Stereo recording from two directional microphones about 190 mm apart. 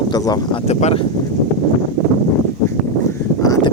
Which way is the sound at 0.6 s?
35° left (ahead or behind).